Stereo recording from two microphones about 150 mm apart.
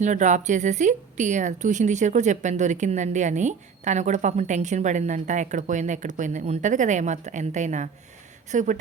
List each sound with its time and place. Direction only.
0.0 s a woman's voice: 55° right (ahead or behind)